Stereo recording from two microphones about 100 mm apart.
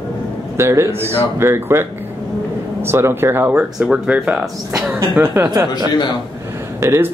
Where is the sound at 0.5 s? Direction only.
25° right (ahead or behind).